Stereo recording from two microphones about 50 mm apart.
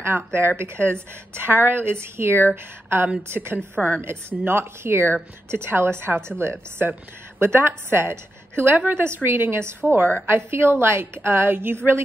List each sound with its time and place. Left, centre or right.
0.0 s a woman's voice: right
9.0 s a woman's voice: right